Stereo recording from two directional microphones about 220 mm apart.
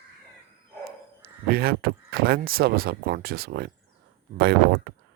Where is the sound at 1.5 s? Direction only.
45° right (ahead or behind).